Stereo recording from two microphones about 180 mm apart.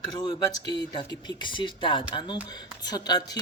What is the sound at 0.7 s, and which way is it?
Speech, 25° left (ahead or behind).